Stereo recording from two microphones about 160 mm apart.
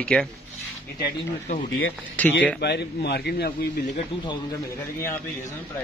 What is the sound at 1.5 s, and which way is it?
Speech, 55° left (ahead or behind).